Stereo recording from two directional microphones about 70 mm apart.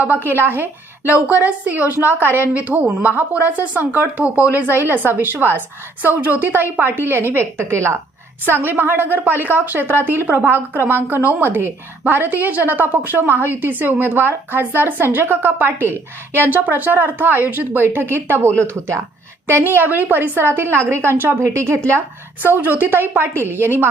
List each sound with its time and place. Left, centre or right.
0.3 s a woman's voice: right
8.4 s a woman's voice: right
22.4 s a woman's voice: right